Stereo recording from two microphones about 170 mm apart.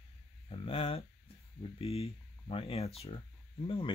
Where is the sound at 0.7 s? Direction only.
35° left (ahead or behind).